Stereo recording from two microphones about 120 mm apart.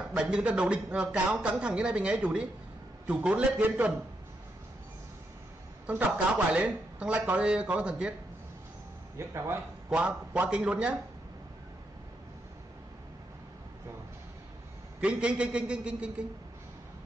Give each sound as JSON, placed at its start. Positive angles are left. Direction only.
{"t": 0.1, "sound": "speech", "side_deg": -10}
{"t": 5.9, "sound": "speech", "side_deg": -10}
{"t": 9.2, "sound": "a man's voice", "side_deg": -25}
{"t": 9.8, "sound": "speech", "side_deg": -10}
{"t": 15.0, "sound": "speech", "side_deg": -10}